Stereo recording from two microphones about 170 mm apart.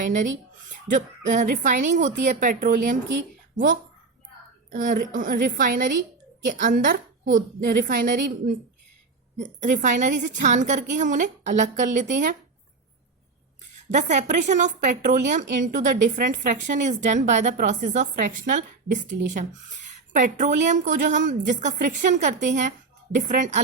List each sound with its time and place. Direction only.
0.0 s a woman's voice: 50° right (ahead or behind)
4.7 s a woman's voice: 50° right (ahead or behind)
7.3 s a woman's voice: 65° right (ahead or behind); by 12.4 s 50° right (ahead or behind)
13.9 s a woman's voice: 45° right (ahead or behind)
20.1 s a woman's voice: 50° right (ahead or behind)